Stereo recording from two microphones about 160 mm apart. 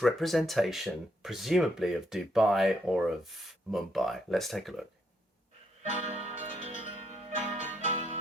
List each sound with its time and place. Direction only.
0.0 s speech: centre (ahead or behind)
6.2 s music: 45° right (ahead or behind)